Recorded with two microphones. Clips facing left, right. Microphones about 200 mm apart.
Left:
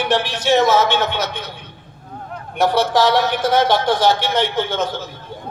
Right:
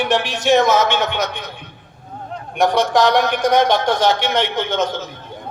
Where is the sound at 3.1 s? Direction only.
15° right (ahead or behind).